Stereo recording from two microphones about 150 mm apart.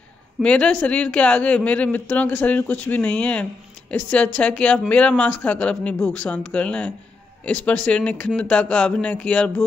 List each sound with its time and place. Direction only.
0.4 s speech: 5° left (ahead or behind)